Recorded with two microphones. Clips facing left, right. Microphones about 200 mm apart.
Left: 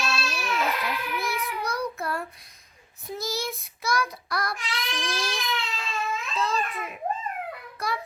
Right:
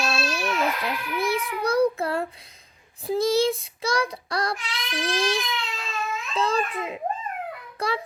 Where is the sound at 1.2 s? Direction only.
30° right (ahead or behind).